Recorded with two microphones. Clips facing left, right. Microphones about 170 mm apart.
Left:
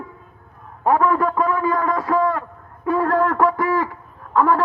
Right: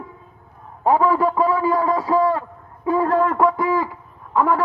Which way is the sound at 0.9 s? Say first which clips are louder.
Right 1 dB; 20° right (ahead or behind).